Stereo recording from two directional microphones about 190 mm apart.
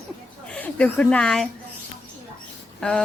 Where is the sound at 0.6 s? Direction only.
5° left (ahead or behind).